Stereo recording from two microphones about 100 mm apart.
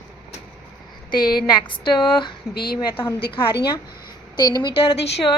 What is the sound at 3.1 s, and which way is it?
Speech, 65° left (ahead or behind).